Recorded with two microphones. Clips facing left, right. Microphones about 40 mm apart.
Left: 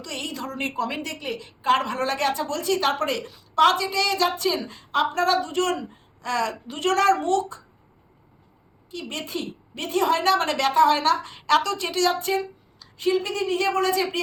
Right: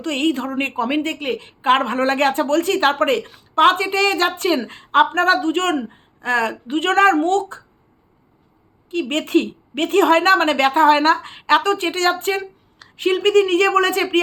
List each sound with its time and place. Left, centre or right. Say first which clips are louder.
0.0 s a woman's voice: right 11 dB; right
8.9 s a woman's voice: right 13 dB; right